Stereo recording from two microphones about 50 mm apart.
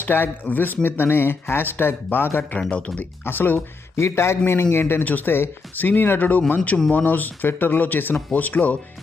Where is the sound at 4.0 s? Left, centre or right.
Left.